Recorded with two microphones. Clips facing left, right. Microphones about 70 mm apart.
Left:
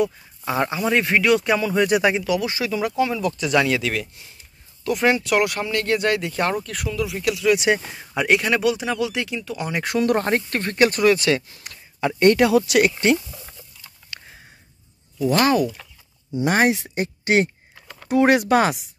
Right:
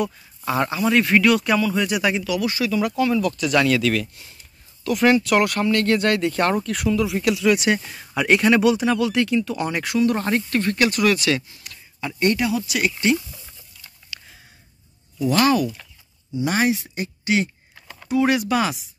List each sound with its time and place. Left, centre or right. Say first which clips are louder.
0.0 s speech: left 2 dB; centre
7.5 s speech: left 1 dB; centre
8.3 s speech: right 3 dB; centre
9.8 s speech: left 1 dB; left
10.2 s speech: right 1 dB; left
12.0 s speech: left 5 dB; left
13.0 s a sound: left 1 dB; left
15.3 s speech: even; left
16.3 s speech: left 2 dB; left